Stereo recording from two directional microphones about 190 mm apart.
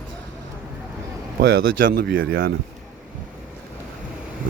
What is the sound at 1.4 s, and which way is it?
Speech, 55° right (ahead or behind).